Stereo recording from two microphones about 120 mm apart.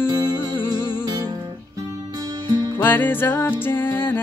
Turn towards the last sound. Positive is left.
turn(degrees=15)  # may be behind; listen again after turning